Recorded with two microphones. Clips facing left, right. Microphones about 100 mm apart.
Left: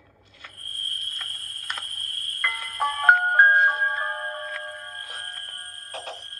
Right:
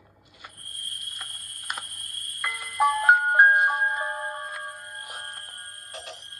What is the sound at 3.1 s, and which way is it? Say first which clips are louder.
Music: left 3 dB; 10° right (ahead or behind).